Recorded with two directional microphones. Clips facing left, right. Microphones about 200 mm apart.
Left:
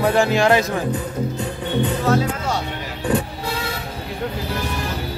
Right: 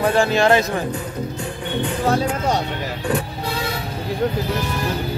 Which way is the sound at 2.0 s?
30° right (ahead or behind).